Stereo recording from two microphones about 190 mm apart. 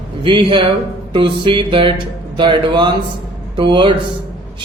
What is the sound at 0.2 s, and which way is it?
Speech, 25° right (ahead or behind).